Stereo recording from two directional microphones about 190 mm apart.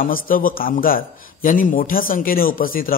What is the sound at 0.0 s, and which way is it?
A man's voice, 45° left (ahead or behind).